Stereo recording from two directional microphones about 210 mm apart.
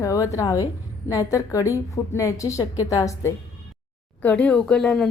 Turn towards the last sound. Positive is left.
turn(degrees=5)  # may be behind; listen again after turning